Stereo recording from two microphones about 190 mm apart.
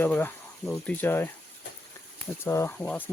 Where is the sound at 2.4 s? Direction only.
15° left (ahead or behind).